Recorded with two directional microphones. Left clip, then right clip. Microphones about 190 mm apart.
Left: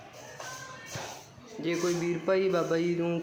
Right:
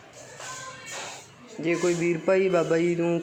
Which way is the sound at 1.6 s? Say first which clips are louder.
Right 5 dB; 20° right (ahead or behind).